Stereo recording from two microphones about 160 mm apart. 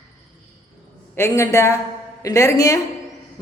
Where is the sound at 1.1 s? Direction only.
15° left (ahead or behind).